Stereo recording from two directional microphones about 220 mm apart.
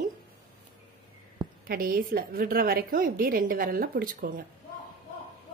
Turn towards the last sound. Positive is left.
turn(degrees=-40)  # may be behind; listen again after turning